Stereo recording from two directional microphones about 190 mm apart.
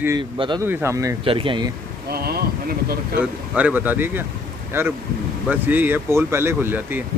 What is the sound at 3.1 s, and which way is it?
Speech, 10° right (ahead or behind).